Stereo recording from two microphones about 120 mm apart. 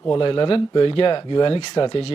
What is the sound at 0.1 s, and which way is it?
Speech, 45° left (ahead or behind).